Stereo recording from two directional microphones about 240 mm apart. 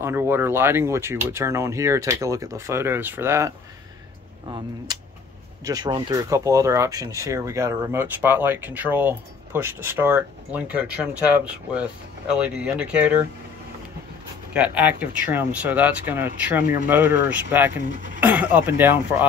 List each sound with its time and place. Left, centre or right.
0.0 s speech: centre
14.5 s speech: centre
17.8 s speech: right
18.2 s speech: centre